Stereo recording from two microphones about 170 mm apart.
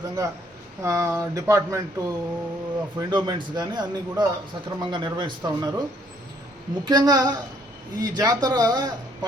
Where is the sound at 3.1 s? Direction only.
25° right (ahead or behind).